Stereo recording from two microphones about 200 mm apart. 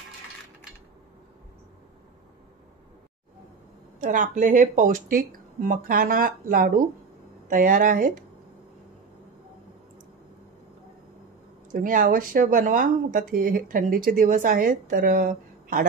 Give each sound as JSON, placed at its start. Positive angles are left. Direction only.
{"t": 4.0, "sound": "speech", "side_deg": -40}
{"t": 11.7, "sound": "speech", "side_deg": -45}